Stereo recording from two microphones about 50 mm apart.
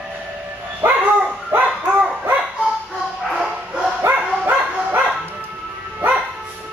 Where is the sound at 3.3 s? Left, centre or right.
Centre.